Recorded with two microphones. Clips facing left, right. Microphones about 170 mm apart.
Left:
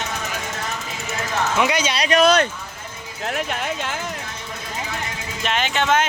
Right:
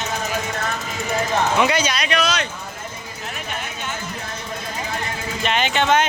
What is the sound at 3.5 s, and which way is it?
Speech, 90° left.